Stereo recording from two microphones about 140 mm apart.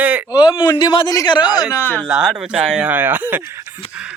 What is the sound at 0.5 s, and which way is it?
Speech, 30° left (ahead or behind).